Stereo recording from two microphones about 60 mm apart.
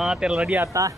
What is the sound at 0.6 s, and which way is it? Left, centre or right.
Speech, right.